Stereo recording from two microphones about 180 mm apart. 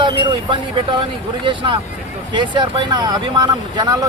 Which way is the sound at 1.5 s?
30° right (ahead or behind).